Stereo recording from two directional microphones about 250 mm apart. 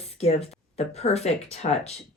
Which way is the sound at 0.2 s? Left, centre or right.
Left.